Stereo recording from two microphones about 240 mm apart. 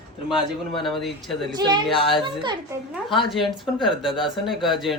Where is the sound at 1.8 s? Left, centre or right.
Centre.